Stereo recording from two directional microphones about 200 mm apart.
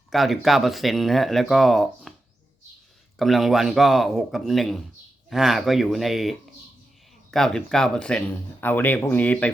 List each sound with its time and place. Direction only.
0.1 s speech: centre (ahead or behind)
3.2 s speech: centre (ahead or behind)